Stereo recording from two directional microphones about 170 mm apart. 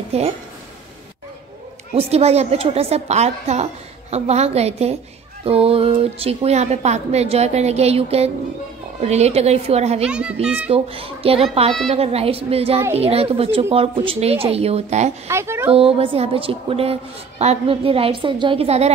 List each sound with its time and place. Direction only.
0.1 s a woman's voice: 35° right (ahead or behind)
2.0 s a woman's voice: 35° right (ahead or behind)
10.0 s a child's voice: 5° right (ahead or behind)
10.7 s a woman's voice: 35° right (ahead or behind)
15.2 s a child's voice: 15° right (ahead or behind)
15.7 s a woman's voice: 35° right (ahead or behind)